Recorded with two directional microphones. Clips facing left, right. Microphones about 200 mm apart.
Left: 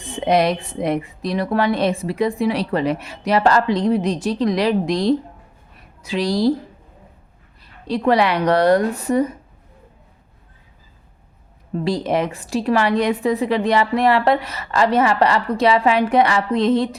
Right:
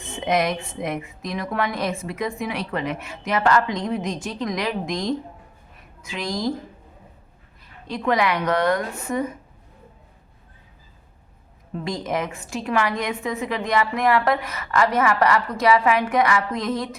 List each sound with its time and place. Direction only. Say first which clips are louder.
0.3 s a woman's voice: left 5 dB; 30° left (ahead or behind)
7.6 s a woman's voice: left 7 dB; 35° left (ahead or behind)
11.7 s a woman's voice: left 6 dB; 35° left (ahead or behind)